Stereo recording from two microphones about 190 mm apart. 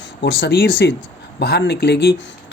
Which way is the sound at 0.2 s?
60° left (ahead or behind).